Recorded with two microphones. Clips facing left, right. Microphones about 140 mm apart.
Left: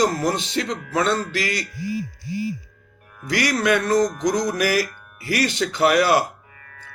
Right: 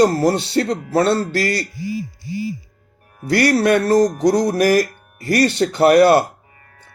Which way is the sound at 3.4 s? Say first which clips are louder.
Right 5 dB; 40° right (ahead or behind).